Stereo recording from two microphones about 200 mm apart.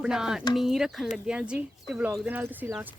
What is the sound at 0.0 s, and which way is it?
Speech, 5° right (ahead or behind).